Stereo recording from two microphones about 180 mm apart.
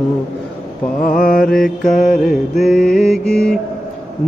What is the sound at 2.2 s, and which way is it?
Mantra, centre (ahead or behind).